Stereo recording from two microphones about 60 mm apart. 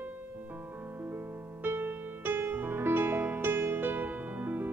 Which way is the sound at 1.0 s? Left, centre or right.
Right.